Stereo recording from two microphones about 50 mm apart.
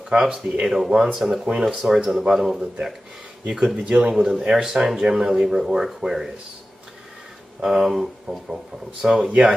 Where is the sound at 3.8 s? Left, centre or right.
Right.